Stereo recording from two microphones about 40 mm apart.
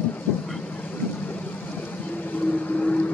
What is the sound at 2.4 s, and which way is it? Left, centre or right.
Vehicle, left.